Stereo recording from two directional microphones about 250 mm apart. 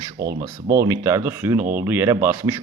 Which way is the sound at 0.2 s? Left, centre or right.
Centre.